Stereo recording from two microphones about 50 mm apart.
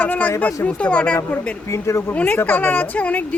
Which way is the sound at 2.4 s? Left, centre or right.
Left.